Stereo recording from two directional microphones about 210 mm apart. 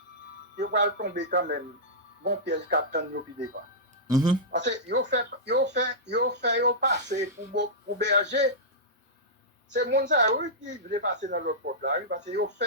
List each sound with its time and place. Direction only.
0.6 s speech: 55° right (ahead or behind)
4.0 s speech: 20° right (ahead or behind)
4.5 s speech: 55° right (ahead or behind)
9.7 s speech: 55° right (ahead or behind)
10.6 s speech: 35° right (ahead or behind); by 12.6 s 55° right (ahead or behind)